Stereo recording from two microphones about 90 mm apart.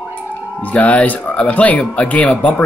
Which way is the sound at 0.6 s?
15° left (ahead or behind).